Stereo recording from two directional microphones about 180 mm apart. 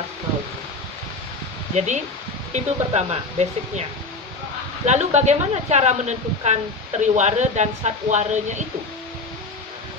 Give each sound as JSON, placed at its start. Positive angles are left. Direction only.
{"t": 1.8, "sound": "speech", "side_deg": -40}
{"t": 4.8, "sound": "speech", "side_deg": -40}